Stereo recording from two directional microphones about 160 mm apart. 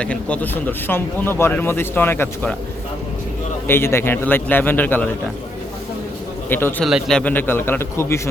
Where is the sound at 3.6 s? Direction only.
15° left (ahead or behind).